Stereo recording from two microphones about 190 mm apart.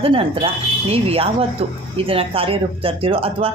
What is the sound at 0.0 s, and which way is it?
Speech, 30° right (ahead or behind).